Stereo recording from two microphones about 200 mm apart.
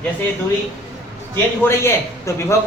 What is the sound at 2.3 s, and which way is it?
Speech, 15° left (ahead or behind).